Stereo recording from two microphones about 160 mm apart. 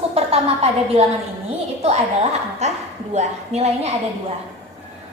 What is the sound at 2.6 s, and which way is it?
A woman's voice, 45° right (ahead or behind).